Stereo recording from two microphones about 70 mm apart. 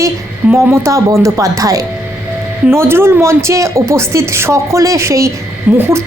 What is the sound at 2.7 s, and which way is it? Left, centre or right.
A woman's voice, right.